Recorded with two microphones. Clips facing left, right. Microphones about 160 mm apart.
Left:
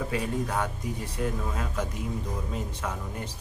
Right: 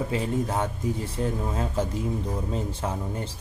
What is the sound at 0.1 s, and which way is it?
Speech, 25° right (ahead or behind).